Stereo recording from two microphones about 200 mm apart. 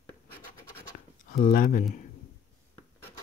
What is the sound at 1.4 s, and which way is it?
Speech, 40° left (ahead or behind).